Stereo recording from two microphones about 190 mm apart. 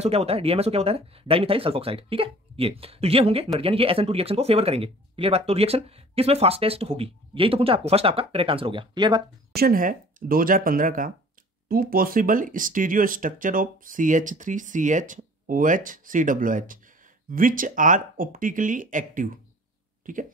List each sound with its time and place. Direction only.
0.0 s speech: 30° right (ahead or behind)
9.6 s speech: 50° right (ahead or behind)